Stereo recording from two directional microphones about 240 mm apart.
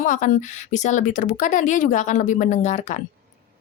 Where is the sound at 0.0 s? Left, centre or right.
Left.